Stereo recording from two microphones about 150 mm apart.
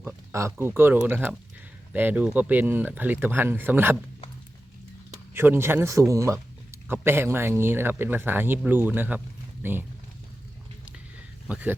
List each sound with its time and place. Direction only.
0.3 s speech: 20° right (ahead or behind)
5.3 s speech: 15° right (ahead or behind)
11.4 s speech: 10° right (ahead or behind)